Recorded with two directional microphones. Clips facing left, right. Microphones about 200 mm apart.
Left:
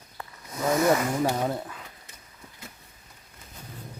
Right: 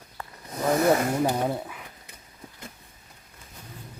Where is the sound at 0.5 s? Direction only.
35° right (ahead or behind).